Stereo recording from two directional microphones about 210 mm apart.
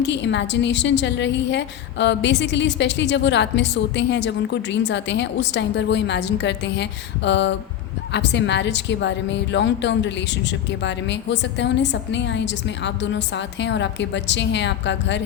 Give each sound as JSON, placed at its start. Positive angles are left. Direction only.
{"t": 0.0, "sound": "a woman's voice", "side_deg": 55}